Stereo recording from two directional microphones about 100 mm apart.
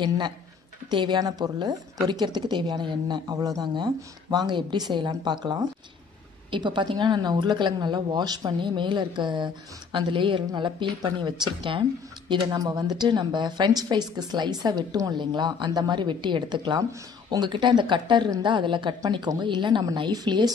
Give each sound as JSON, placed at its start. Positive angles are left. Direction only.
{"t": 0.8, "sound": "a woman's voice", "side_deg": -50}